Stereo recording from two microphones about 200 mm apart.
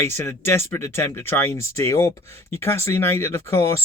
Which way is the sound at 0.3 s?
10° left (ahead or behind).